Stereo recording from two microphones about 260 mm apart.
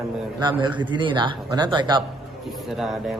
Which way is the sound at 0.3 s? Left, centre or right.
Centre.